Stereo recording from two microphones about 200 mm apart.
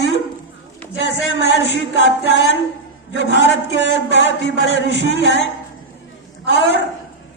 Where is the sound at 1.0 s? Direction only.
65° left (ahead or behind).